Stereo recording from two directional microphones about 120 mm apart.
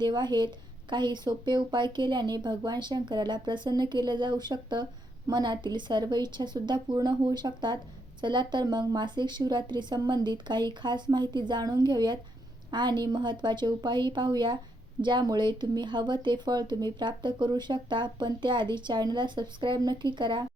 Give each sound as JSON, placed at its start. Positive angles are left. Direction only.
{"t": 0.0, "sound": "speech", "side_deg": -40}